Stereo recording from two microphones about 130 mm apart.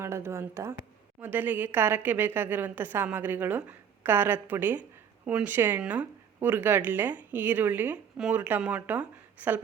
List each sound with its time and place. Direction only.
0.0 s a woman's voice: 20° right (ahead or behind)